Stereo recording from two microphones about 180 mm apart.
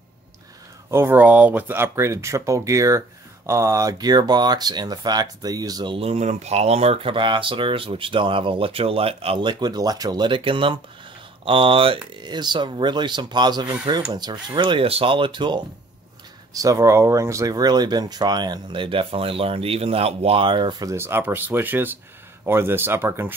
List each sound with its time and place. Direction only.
0.8 s speech: 15° right (ahead or behind)
20.9 s speech: 15° right (ahead or behind)